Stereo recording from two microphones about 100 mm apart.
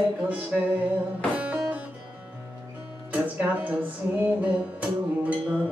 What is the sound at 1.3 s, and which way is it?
Music, 15° right (ahead or behind).